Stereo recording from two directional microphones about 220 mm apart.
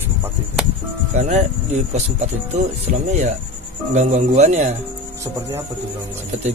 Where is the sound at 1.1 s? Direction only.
30° right (ahead or behind).